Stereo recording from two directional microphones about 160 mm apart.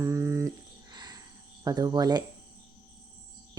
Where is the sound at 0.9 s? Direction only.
25° right (ahead or behind).